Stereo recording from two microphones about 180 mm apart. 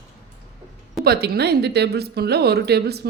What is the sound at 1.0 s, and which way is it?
A woman's voice, 60° right (ahead or behind).